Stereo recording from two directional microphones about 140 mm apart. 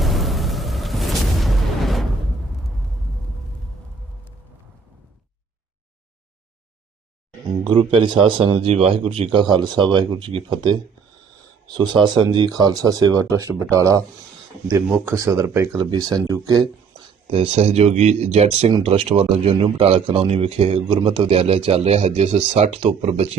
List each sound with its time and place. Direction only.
0.0 s music: centre (ahead or behind)
7.6 s speech: 35° right (ahead or behind)
17.2 s speech: 45° right (ahead or behind)
18.7 s speech: 35° right (ahead or behind)